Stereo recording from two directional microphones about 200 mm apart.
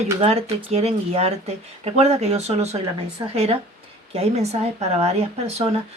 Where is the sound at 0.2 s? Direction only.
30° right (ahead or behind).